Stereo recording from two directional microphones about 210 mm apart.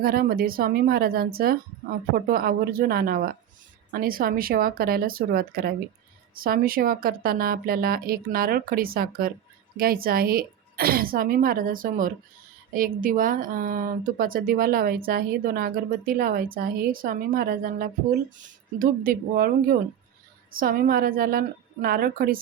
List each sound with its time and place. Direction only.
0.0 s speech: 45° right (ahead or behind)